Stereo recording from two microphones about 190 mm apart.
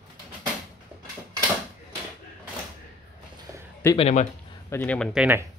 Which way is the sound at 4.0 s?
35° left (ahead or behind).